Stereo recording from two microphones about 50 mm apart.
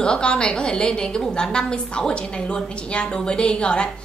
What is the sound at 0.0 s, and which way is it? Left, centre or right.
A woman's voice, centre.